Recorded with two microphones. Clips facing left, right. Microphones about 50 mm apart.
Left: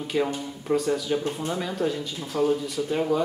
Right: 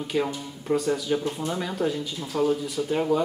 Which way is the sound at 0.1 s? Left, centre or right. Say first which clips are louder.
Left 1 dB; centre.